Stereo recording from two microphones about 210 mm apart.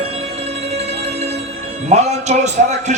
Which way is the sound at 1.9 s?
30° right (ahead or behind).